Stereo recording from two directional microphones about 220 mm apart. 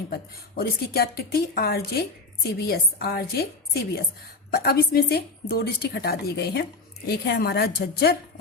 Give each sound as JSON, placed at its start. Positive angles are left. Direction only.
{"t": 0.1, "sound": "a woman's voice", "side_deg": 45}